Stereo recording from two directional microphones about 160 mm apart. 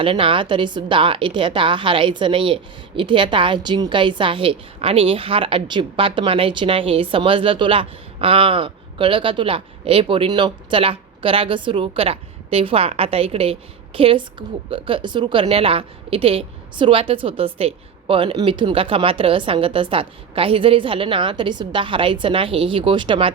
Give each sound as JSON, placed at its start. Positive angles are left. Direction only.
{"t": 0.0, "sound": "a woman's voice", "side_deg": -35}